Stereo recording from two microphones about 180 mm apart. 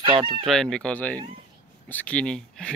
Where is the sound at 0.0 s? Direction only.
25° right (ahead or behind).